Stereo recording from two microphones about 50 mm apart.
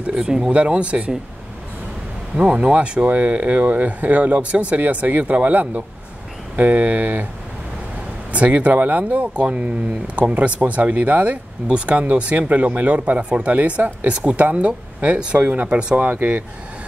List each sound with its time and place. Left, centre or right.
0.0 s speech: centre
2.3 s speech: right
3.1 s speech: right
8.3 s speech: right
15.3 s speech: right